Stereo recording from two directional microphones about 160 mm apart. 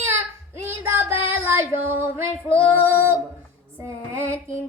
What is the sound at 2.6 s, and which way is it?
Female singing, 15° right (ahead or behind).